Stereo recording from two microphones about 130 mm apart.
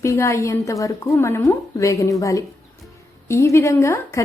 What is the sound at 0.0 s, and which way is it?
A woman's voice, 25° left (ahead or behind).